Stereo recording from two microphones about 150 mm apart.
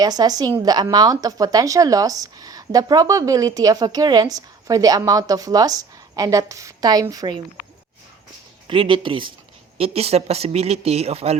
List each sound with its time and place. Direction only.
0.0 s speech: 25° right (ahead or behind)
8.6 s speech: 35° right (ahead or behind)